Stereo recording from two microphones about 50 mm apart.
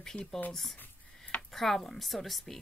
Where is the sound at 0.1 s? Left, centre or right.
Centre.